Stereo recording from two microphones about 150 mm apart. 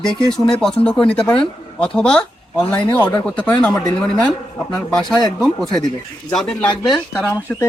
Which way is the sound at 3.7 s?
25° left (ahead or behind).